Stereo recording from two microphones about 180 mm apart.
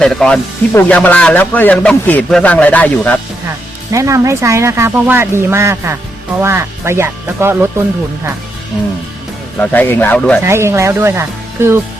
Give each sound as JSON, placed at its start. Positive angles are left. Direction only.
{"t": 0.0, "sound": "a man's voice", "side_deg": 5}
{"t": 3.9, "sound": "speech", "side_deg": -15}
{"t": 9.6, "sound": "a man's voice", "side_deg": 10}
{"t": 10.4, "sound": "speech", "side_deg": -15}